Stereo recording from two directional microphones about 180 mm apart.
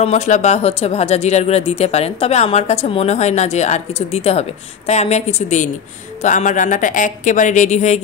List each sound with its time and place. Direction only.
0.0 s speech: 40° left (ahead or behind)